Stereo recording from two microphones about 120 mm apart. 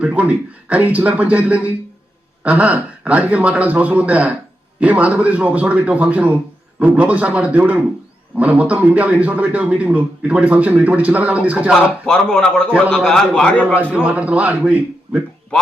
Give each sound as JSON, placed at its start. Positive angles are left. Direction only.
{"t": 0.0, "sound": "a man's voice", "side_deg": -10}
{"t": 11.7, "sound": "a man's voice", "side_deg": 5}
{"t": 13.7, "sound": "a man's voice", "side_deg": -10}